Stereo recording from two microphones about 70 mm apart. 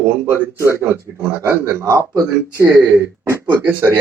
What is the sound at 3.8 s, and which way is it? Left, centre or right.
Speech, right.